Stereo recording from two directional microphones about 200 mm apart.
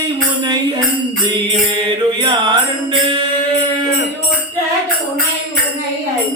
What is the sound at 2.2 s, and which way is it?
Music, 25° right (ahead or behind).